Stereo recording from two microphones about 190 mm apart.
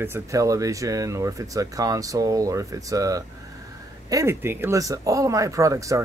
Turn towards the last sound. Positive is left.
turn(degrees=-15)  # may be behind; listen again after turning